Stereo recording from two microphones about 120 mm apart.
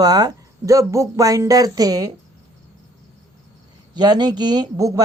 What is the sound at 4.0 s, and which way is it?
Speech, 35° right (ahead or behind).